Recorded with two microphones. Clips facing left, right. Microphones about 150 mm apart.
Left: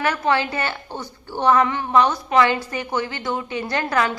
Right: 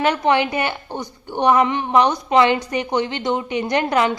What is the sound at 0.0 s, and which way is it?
A woman's voice, 20° right (ahead or behind).